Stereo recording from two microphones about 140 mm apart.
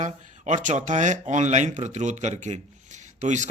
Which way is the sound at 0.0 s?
60° right (ahead or behind).